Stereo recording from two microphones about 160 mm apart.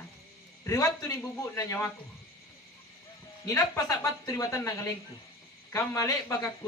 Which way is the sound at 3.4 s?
20° left (ahead or behind).